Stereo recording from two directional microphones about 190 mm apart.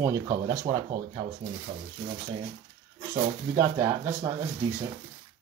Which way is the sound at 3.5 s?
15° right (ahead or behind).